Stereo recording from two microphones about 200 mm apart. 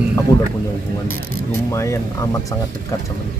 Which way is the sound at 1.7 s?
15° left (ahead or behind).